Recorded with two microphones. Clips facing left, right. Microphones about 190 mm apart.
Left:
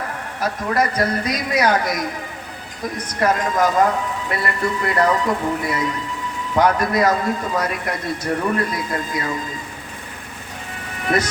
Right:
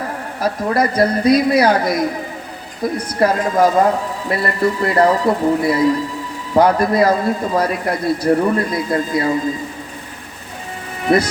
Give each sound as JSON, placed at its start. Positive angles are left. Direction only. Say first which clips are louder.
{"t": 0.3, "sound": "a man's voice", "louder": "right 3 dB", "side_deg": -35}
{"t": 3.2, "sound": "a man's voice", "louder": "right 4 dB", "side_deg": -30}
{"t": 11.1, "sound": "a man's voice", "louder": "right 6 dB", "side_deg": -35}